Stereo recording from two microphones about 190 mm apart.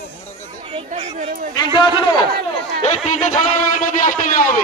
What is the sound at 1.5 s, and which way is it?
Speech, 25° left (ahead or behind).